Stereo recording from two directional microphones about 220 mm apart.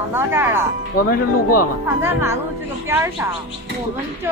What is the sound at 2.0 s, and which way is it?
Speech, 10° right (ahead or behind).